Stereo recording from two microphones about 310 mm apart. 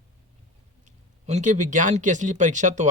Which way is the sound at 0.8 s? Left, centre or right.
Right.